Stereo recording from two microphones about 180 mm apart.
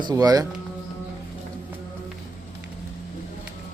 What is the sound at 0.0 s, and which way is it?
Speech, 20° right (ahead or behind).